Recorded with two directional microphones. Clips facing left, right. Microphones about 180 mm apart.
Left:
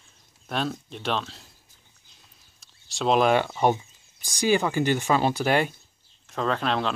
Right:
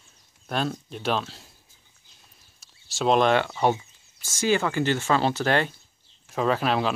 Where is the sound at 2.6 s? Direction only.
Centre (ahead or behind).